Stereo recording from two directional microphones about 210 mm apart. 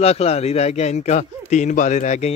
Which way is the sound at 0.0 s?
30° left (ahead or behind).